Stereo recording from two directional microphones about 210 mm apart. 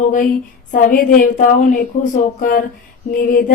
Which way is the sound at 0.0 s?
40° left (ahead or behind).